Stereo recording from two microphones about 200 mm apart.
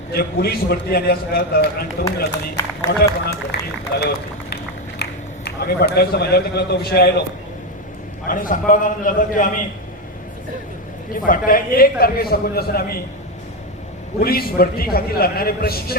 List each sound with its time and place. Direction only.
0.1 s a man's voice: 50° left (ahead or behind)
8.3 s a man's voice: 45° left (ahead or behind)
11.1 s a man's voice: 45° left (ahead or behind)
14.2 s a man's voice: 50° left (ahead or behind)